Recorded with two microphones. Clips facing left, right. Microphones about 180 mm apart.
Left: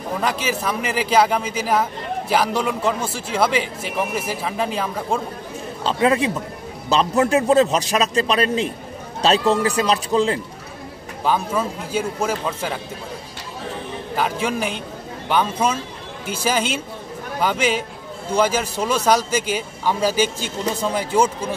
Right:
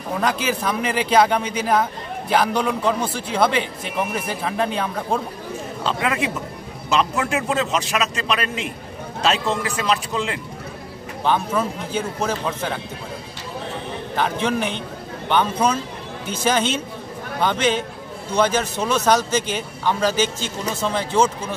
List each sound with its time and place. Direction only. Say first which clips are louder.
0.2 s a man's voice: right 2 dB; 5° left (ahead or behind)
5.9 s a man's voice: left 5 dB; 30° left (ahead or behind)
11.2 s speech: even; 5° left (ahead or behind)
14.1 s speech: right 1 dB; 5° left (ahead or behind)